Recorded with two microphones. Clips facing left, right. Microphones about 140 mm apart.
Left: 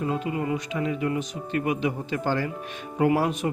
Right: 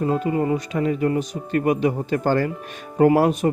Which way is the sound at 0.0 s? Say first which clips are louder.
Right 6 dB; 40° right (ahead or behind).